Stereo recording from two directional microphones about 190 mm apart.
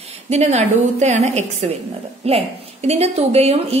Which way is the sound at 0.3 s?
35° right (ahead or behind).